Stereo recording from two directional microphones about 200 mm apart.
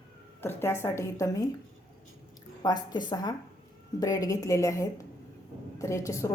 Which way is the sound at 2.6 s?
20° left (ahead or behind).